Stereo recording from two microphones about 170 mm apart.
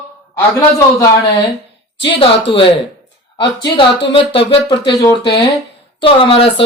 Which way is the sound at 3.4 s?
30° left (ahead or behind).